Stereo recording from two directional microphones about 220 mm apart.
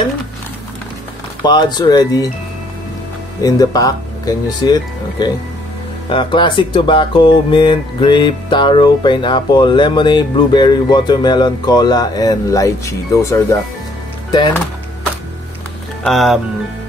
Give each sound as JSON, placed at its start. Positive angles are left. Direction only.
{"t": 1.4, "sound": "speech", "side_deg": 20}
{"t": 3.4, "sound": "speech", "side_deg": 15}
{"t": 6.0, "sound": "speech", "side_deg": 20}
{"t": 16.0, "sound": "speech", "side_deg": 0}